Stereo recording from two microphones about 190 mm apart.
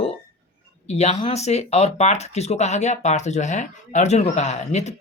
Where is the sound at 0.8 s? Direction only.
35° left (ahead or behind).